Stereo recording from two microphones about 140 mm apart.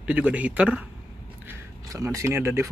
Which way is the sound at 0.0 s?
10° right (ahead or behind).